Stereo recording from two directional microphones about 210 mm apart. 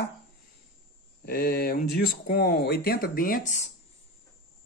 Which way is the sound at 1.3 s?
45° left (ahead or behind).